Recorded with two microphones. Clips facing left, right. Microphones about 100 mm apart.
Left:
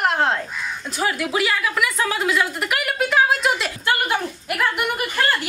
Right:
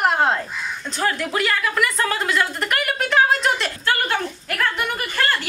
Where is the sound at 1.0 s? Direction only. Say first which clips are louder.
Even; 10° left (ahead or behind).